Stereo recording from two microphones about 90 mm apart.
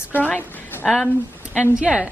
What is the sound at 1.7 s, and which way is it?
Speech, 10° right (ahead or behind).